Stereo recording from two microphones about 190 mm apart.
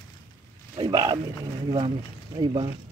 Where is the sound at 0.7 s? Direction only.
25° right (ahead or behind).